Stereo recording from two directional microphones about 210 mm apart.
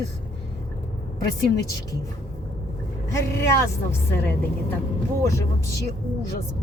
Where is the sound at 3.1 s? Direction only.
15° left (ahead or behind).